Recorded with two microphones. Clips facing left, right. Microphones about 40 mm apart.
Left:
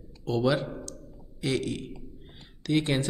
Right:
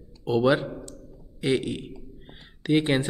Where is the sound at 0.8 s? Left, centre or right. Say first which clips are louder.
Even; right.